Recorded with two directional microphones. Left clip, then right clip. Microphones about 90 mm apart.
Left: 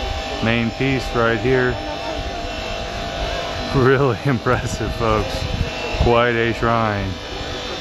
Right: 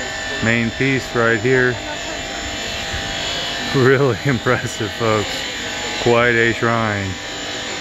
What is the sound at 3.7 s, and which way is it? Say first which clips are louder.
Speech: right 1 dB; 20° right (ahead or behind).